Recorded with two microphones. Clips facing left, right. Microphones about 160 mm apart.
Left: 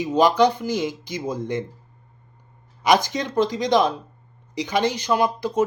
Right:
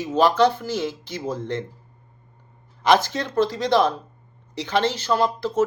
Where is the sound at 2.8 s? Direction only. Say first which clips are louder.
Even; 15° left (ahead or behind).